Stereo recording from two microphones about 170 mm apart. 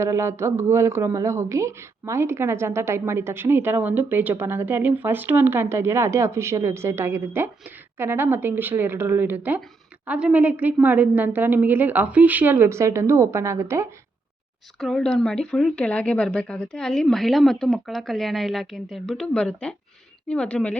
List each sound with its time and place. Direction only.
0.0 s speech: 15° right (ahead or behind)
14.8 s speech: centre (ahead or behind)